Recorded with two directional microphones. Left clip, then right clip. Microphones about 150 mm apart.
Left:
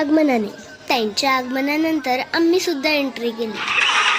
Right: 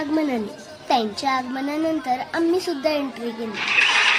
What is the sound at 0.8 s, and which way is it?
A child's voice, 15° left (ahead or behind).